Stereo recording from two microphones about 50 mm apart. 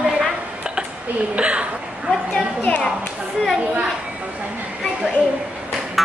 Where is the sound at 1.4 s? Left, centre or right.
Right.